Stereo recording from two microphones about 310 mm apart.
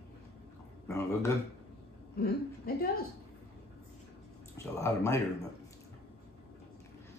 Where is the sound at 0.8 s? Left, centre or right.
Centre.